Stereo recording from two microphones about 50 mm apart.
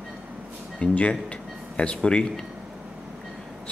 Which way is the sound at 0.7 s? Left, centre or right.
Left.